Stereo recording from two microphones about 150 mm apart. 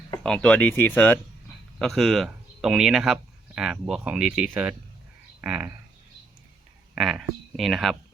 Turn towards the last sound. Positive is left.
turn(degrees=0)  # may be behind; listen again after turning